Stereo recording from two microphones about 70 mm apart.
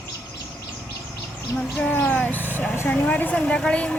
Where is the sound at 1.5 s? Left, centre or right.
Centre; by 2.9 s left.